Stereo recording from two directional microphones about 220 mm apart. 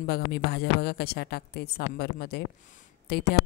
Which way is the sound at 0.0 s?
45° left (ahead or behind).